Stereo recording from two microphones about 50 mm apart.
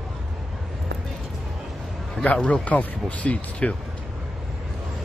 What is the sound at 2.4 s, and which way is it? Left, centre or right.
Speech, left.